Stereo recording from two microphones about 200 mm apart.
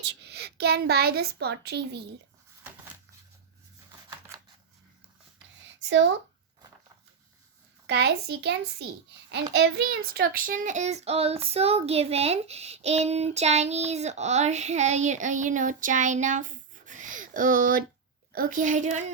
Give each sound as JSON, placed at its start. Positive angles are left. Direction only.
{"t": 0.0, "sound": "a child's voice", "side_deg": -55}
{"t": 7.9, "sound": "a child's voice", "side_deg": -55}